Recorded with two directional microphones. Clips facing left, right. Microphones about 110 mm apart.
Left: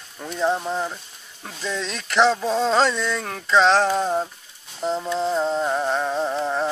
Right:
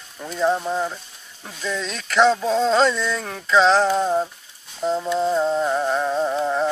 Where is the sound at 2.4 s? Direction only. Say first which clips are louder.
Right 2 dB; 5° left (ahead or behind).